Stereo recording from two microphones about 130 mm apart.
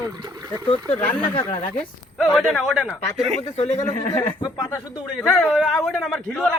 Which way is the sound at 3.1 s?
55° right (ahead or behind).